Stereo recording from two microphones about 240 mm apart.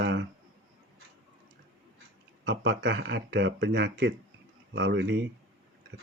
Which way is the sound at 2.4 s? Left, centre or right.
Right.